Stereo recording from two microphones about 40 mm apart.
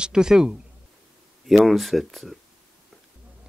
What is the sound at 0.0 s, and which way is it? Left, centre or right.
Speech, centre.